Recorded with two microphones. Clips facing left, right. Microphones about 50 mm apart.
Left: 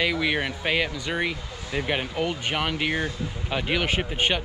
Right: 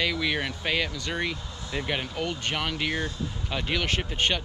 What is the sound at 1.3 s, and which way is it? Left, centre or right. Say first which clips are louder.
Speech: left 3 dB; left.